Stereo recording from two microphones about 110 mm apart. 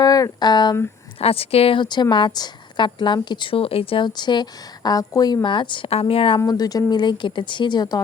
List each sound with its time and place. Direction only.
0.0 s speech: 35° left (ahead or behind)
1.2 s a woman's voice: 60° left (ahead or behind)
6.5 s a woman's voice: 35° left (ahead or behind)